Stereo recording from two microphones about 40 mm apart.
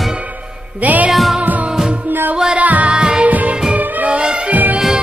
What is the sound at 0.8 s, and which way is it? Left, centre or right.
Music, right.